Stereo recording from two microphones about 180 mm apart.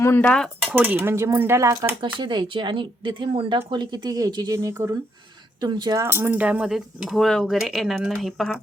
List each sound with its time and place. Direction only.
0.0 s speech: 10° left (ahead or behind)
0.7 s speech: 10° right (ahead or behind)